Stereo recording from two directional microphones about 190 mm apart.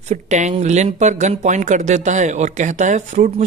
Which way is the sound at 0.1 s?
40° right (ahead or behind).